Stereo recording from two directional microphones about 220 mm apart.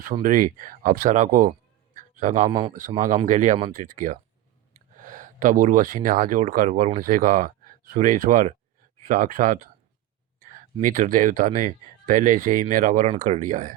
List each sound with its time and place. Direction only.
0.0 s speech: 35° right (ahead or behind)
2.0 s a sound: 35° right (ahead or behind)
2.5 s a man's voice: 20° right (ahead or behind)
2.7 s speech: 35° right (ahead or behind)